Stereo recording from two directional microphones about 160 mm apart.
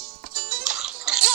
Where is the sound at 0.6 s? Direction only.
5° right (ahead or behind).